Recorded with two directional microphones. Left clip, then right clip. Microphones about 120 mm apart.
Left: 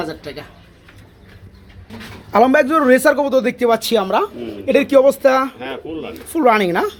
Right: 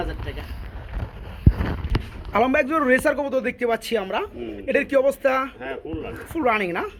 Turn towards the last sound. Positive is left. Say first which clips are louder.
# left 8 dB
turn(degrees=20)  # may be behind; listen again after turning